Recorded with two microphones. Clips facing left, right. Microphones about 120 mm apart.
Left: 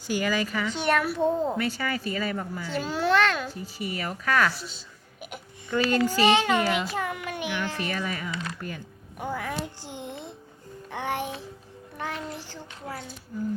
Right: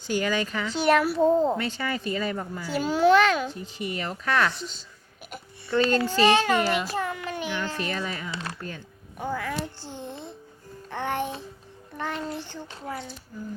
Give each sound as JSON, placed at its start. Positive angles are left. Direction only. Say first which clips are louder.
{"t": 0.1, "sound": "a child's voice", "louder": "even", "side_deg": 5}
{"t": 2.3, "sound": "a child's voice", "louder": "right 1 dB", "side_deg": -5}
{"t": 4.0, "sound": "a child's voice", "louder": "even", "side_deg": 10}
{"t": 5.3, "sound": "a sound", "louder": "right 2 dB", "side_deg": 10}
{"t": 6.1, "sound": "a child's voice", "louder": "right 1 dB", "side_deg": 15}
{"t": 8.3, "sound": "speech", "louder": "left 1 dB", "side_deg": -30}
{"t": 8.6, "sound": "a child's voice", "louder": "left 1 dB", "side_deg": 15}